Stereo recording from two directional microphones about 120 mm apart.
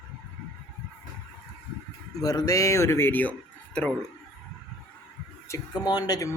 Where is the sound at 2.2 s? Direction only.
30° left (ahead or behind); by 3.9 s 10° left (ahead or behind).